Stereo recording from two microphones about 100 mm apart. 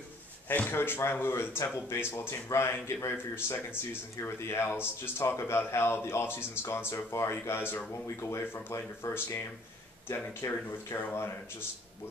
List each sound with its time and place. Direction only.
0.5 s speech: 20° left (ahead or behind)